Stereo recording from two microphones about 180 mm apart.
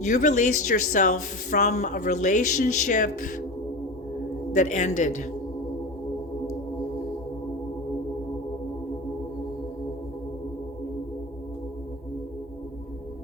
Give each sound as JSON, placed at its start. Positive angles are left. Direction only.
{"t": 0.0, "sound": "speech", "side_deg": 45}
{"t": 4.5, "sound": "speech", "side_deg": 40}